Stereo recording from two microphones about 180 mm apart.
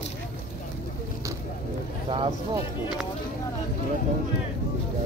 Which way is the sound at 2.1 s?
30° right (ahead or behind).